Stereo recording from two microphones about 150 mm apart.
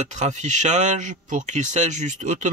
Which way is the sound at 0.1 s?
50° right (ahead or behind).